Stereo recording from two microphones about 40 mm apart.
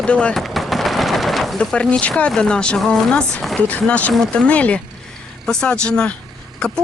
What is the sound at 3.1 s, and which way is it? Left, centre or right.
Speech, left.